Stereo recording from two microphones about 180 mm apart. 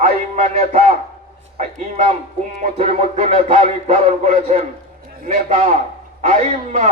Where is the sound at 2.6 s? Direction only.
35° right (ahead or behind).